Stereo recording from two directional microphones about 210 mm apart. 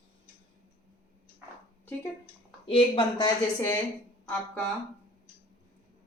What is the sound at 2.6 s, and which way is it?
A woman's voice, 25° left (ahead or behind).